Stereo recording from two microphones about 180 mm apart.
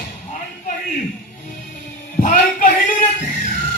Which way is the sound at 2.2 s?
45° left (ahead or behind).